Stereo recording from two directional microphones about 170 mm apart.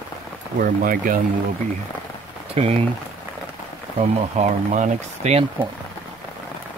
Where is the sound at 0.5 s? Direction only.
55° right (ahead or behind).